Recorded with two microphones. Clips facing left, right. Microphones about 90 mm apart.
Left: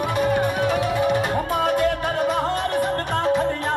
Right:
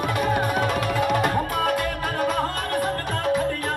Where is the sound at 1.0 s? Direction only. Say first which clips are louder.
Left 1 dB; 25° left (ahead or behind).